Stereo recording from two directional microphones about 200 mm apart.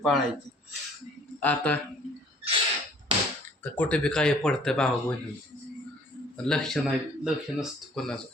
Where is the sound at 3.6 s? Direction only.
5° left (ahead or behind).